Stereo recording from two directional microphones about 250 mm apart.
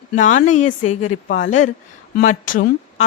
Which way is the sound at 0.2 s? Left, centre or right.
Left.